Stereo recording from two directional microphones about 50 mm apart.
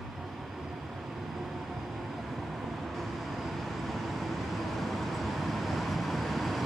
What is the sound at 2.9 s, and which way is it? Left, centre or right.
Vehicle, centre.